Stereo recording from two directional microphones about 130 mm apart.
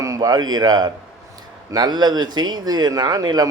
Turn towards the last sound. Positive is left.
turn(degrees=-30)  # may be behind; listen again after turning